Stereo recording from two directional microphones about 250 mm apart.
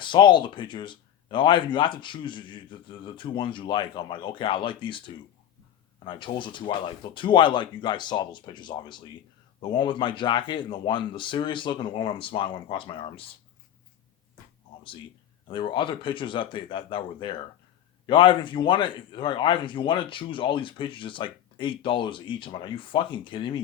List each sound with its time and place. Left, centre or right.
0.0 s a man's voice: centre
15.4 s a man's voice: centre